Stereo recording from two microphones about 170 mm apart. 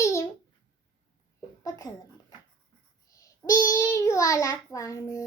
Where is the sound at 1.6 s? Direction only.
20° left (ahead or behind).